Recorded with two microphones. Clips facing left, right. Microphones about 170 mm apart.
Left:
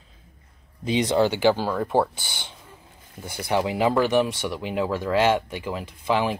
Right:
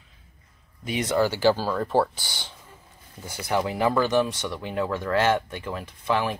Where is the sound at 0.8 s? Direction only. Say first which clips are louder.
Left 3 dB; 20° left (ahead or behind).